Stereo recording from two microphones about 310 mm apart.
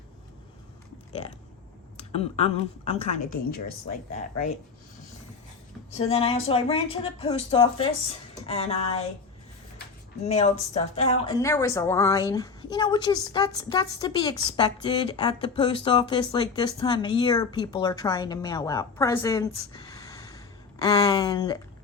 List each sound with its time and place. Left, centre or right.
2.0 s a woman's voice: centre
5.9 s a woman's voice: centre
10.2 s speech: centre